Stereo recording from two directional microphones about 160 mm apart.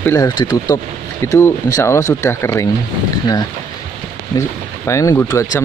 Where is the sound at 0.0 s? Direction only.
15° left (ahead or behind).